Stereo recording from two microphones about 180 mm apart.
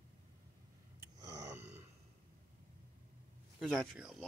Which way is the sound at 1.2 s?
20° right (ahead or behind).